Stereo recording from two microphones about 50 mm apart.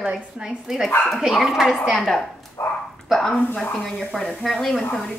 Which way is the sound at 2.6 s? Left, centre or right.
Left.